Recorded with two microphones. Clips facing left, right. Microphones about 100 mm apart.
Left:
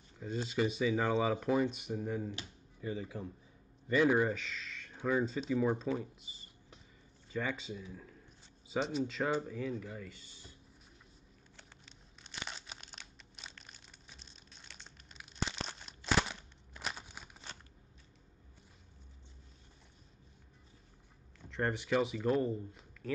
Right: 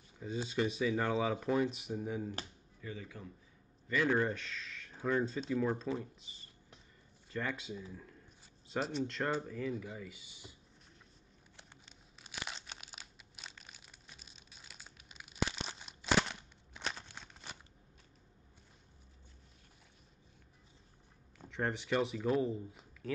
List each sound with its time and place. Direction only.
0.2 s speech: centre (ahead or behind)
2.8 s a man's voice: 20° left (ahead or behind)
4.4 s speech: centre (ahead or behind)
11.5 s crumpling: 10° right (ahead or behind)
15.9 s a sound: centre (ahead or behind)
21.5 s speech: centre (ahead or behind)